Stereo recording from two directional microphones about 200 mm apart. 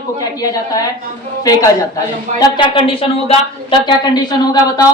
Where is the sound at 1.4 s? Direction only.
20° left (ahead or behind).